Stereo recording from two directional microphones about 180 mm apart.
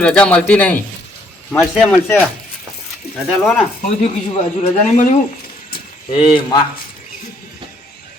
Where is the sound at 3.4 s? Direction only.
Centre (ahead or behind).